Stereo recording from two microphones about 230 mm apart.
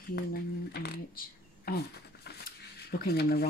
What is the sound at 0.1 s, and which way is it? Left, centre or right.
Speech, left.